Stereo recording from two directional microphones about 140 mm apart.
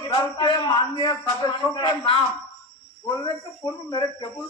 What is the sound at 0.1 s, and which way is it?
A man's voice, 30° left (ahead or behind).